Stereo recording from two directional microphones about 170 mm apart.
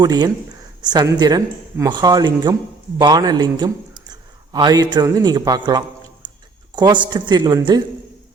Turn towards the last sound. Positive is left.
turn(degrees=-25)  # may be behind; listen again after turning